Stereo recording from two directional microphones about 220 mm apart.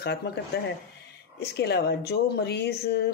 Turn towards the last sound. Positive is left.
turn(degrees=50)  # may be behind; listen again after turning